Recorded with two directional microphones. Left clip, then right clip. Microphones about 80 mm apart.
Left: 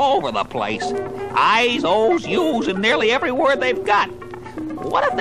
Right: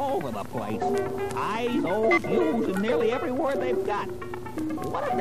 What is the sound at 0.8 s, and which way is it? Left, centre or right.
Speech, centre.